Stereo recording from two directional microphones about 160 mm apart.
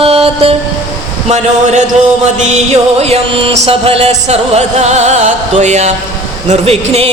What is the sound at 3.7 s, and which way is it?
Music, 35° right (ahead or behind).